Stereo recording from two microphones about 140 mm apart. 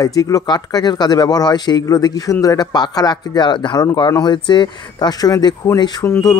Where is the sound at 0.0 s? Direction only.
25° left (ahead or behind).